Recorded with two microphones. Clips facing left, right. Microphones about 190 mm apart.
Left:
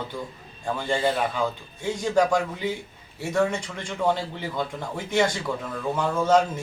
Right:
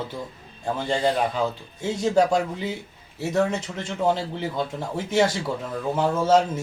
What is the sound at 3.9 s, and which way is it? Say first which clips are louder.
A man's voice: right 1 dB; 25° right (ahead or behind).